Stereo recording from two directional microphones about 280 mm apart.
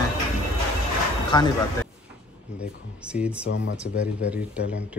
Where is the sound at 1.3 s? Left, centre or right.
Centre.